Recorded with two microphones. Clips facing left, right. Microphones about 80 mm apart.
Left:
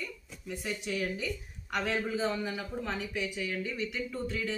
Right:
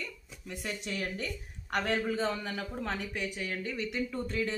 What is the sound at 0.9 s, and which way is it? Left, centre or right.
A woman's voice, right.